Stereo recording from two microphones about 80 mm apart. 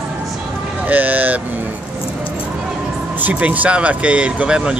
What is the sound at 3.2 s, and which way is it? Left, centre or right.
Speech, centre.